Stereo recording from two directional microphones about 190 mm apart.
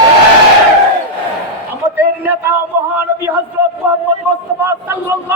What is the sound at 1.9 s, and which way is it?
A man's voice, 10° right (ahead or behind).